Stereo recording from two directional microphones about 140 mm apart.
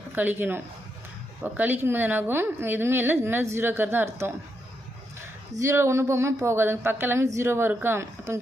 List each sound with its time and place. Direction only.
0.1 s a woman's voice: 15° right (ahead or behind)
5.5 s speech: 20° right (ahead or behind)